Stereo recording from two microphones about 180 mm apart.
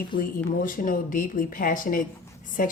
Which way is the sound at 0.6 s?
50° left (ahead or behind).